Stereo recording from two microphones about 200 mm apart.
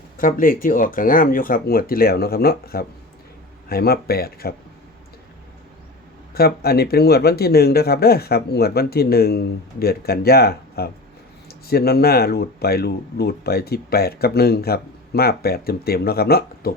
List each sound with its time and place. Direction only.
0.2 s speech: 45° left (ahead or behind)
6.3 s speech: 50° left (ahead or behind)